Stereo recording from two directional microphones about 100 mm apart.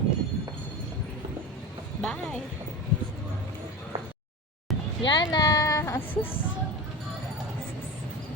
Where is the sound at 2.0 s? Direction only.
10° left (ahead or behind).